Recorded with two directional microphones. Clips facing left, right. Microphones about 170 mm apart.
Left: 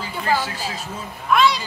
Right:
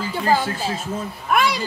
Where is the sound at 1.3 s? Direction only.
50° right (ahead or behind).